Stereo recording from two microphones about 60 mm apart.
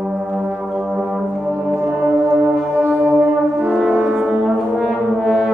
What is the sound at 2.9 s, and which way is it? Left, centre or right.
Music, centre.